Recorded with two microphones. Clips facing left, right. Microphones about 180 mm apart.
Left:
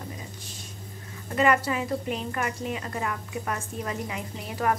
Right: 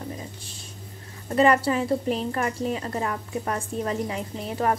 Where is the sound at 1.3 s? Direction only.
35° right (ahead or behind).